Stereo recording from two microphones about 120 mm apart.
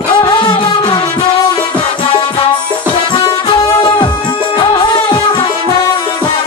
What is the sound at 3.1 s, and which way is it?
Music, 40° left (ahead or behind).